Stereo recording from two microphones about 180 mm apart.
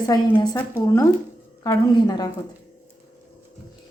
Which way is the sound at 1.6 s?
20° left (ahead or behind).